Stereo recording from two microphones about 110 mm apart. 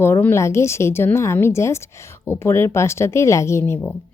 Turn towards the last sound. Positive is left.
turn(degrees=25)  # may be behind; listen again after turning